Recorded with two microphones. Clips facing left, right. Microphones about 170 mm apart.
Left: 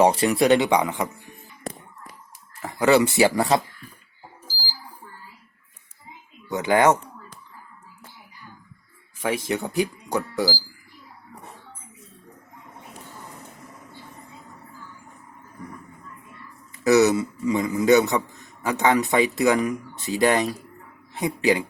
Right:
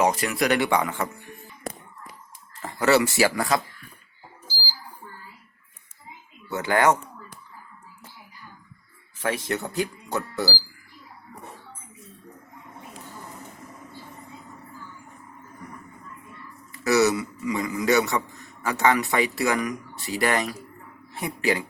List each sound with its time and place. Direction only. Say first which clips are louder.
0.0 s a man's voice: left 5 dB; 30° left (ahead or behind); by 1.1 s 15° left (ahead or behind)
2.6 s a man's voice: left 2 dB; 10° left (ahead or behind)
6.5 s speech: left 3 dB; 15° left (ahead or behind)
9.1 s speech: left 2 dB; 10° left (ahead or behind)
16.7 s a man's voice: left 4 dB; 20° left (ahead or behind)